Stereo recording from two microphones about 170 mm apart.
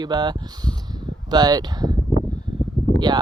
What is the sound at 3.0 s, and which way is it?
Speech, 25° right (ahead or behind).